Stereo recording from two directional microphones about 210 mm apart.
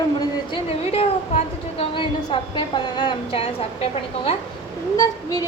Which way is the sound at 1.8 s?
25° left (ahead or behind).